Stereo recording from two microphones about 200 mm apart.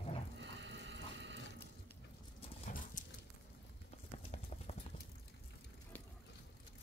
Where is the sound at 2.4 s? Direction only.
40° left (ahead or behind).